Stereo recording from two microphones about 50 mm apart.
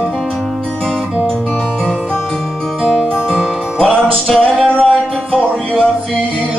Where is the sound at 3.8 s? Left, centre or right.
Centre.